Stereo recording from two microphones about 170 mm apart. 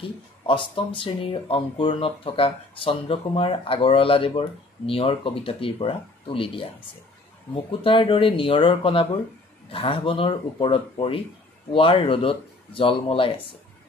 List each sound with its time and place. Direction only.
0.5 s speech: 30° left (ahead or behind)
7.8 s speech: 30° left (ahead or behind)